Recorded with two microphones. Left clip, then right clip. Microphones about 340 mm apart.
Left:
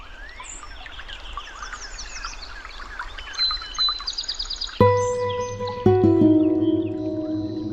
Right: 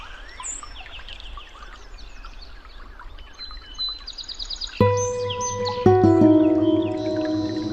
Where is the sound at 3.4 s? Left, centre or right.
Left.